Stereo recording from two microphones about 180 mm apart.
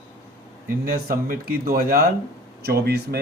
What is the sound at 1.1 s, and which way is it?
Speech, 55° right (ahead or behind).